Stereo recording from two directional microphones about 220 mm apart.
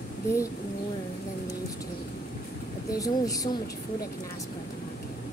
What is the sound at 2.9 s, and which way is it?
Speech, 15° left (ahead or behind).